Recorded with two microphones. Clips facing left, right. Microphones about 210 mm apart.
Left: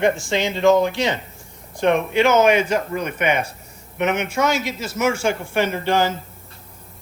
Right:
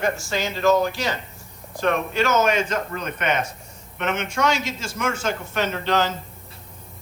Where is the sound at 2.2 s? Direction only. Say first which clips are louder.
Left 5 dB; 10° left (ahead or behind).